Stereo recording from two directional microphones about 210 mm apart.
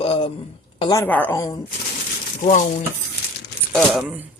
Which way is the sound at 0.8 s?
15° left (ahead or behind).